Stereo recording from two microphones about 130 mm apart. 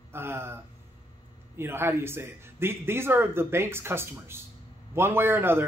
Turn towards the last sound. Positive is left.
turn(degrees=-15)  # may be behind; listen again after turning